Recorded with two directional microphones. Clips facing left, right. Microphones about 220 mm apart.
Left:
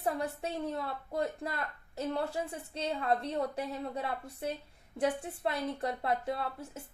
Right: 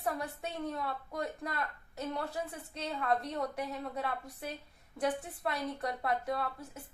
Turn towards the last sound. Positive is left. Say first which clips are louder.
# even
turn(degrees=25)  # may be behind; listen again after turning